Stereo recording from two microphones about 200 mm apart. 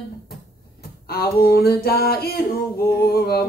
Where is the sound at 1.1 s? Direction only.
50° left (ahead or behind).